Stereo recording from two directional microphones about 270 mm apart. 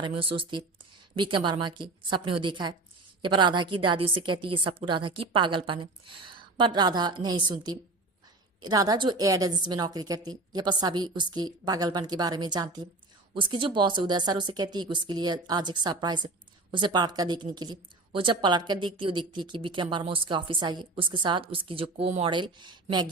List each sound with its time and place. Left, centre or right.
0.0 s speech: centre